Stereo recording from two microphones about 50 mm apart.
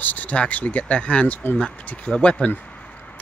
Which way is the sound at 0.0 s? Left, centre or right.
Left.